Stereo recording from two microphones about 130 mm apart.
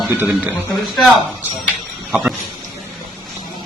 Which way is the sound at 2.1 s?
5° right (ahead or behind).